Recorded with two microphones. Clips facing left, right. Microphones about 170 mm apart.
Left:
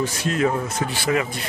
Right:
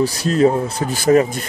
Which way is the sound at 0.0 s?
35° right (ahead or behind).